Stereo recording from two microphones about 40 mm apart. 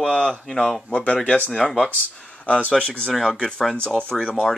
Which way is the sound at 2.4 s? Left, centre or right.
Left.